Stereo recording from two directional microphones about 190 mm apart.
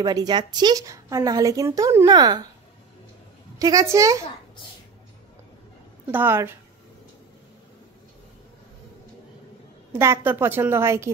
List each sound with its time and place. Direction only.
0.0 s speech: 20° right (ahead or behind)
3.5 s a woman's voice: 20° right (ahead or behind)
6.1 s a woman's voice: 10° right (ahead or behind)
9.9 s a woman's voice: 15° right (ahead or behind)